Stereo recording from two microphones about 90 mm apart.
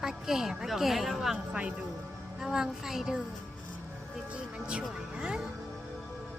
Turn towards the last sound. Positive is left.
turn(degrees=-10)  # may be behind; listen again after turning